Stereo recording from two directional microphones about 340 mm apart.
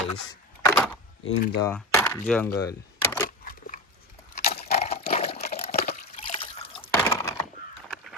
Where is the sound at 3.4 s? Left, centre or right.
Left.